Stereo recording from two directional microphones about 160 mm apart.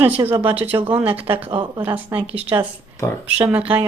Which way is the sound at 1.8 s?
10° right (ahead or behind).